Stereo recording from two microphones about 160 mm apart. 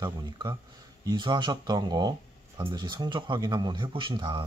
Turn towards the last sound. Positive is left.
turn(degrees=-30)  # may be behind; listen again after turning